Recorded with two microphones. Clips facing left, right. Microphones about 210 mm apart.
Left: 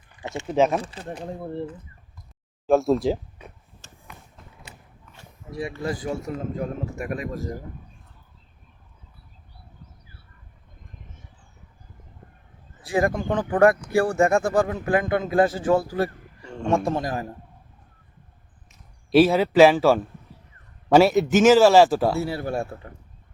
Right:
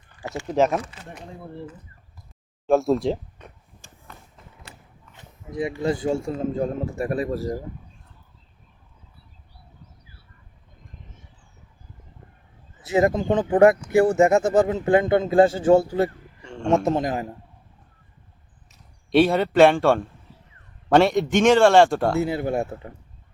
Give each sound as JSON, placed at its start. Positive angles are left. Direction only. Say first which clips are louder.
{"t": 0.2, "sound": "speech", "louder": "even", "side_deg": 20}
{"t": 0.4, "sound": "speech", "louder": "even", "side_deg": 0}
{"t": 0.8, "sound": "speech", "louder": "left 4 dB", "side_deg": 30}
{"t": 2.6, "sound": "speech", "louder": "even", "side_deg": 0}
{"t": 5.1, "sound": "speech", "louder": "right 3 dB", "side_deg": -20}
{"t": 12.8, "sound": "speech", "louder": "right 3 dB", "side_deg": -20}
{"t": 19.1, "sound": "speech", "louder": "left 1 dB", "side_deg": 0}
{"t": 22.2, "sound": "speech", "louder": "right 3 dB", "side_deg": -20}